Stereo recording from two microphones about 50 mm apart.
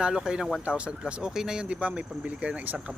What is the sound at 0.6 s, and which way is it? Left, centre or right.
Speech, right.